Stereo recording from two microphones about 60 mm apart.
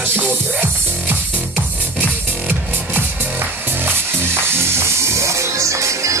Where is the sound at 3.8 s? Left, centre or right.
Right.